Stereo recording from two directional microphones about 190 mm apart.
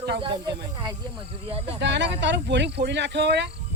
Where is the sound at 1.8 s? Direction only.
70° right (ahead or behind).